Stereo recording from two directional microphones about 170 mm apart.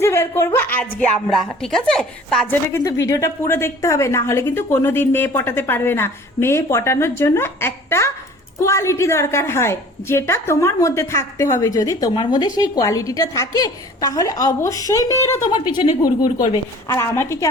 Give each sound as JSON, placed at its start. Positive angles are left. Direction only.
{"t": 0.0, "sound": "a woman's voice", "side_deg": 15}
{"t": 2.6, "sound": "a woman's voice", "side_deg": 15}
{"t": 16.9, "sound": "a woman's voice", "side_deg": 15}